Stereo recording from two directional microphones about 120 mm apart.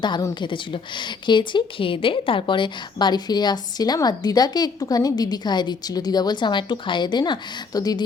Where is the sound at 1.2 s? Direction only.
40° left (ahead or behind).